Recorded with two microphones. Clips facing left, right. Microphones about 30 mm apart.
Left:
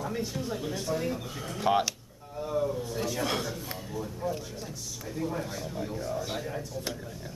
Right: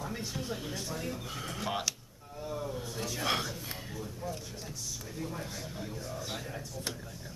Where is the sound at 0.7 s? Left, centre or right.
Centre.